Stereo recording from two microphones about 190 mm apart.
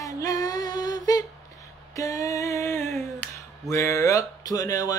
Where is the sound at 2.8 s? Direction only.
Centre (ahead or behind).